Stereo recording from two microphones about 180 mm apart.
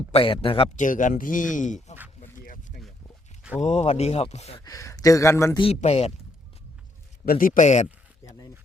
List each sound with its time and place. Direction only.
0.1 s speech: 30° left (ahead or behind)
0.8 s speech: 45° left (ahead or behind)
3.6 s speech: 40° left (ahead or behind)
4.6 s speech: 20° left (ahead or behind)
5.5 s speech: 35° left (ahead or behind)
7.3 s speech: 50° left (ahead or behind)